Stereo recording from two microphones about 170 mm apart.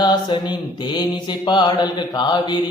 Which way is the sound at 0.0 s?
25° left (ahead or behind).